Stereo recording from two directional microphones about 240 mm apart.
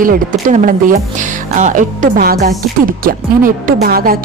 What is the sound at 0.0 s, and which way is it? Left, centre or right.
A woman's voice, right.